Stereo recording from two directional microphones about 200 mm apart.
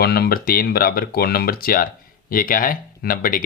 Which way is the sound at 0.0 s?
50° left (ahead or behind).